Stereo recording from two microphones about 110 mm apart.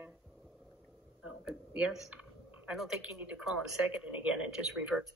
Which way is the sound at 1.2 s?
10° right (ahead or behind).